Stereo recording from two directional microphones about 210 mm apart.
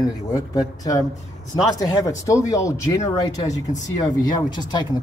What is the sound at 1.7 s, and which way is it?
Speech, 15° left (ahead or behind).